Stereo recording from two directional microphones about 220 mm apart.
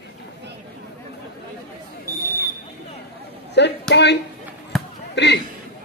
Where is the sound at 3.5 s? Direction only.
50° left (ahead or behind).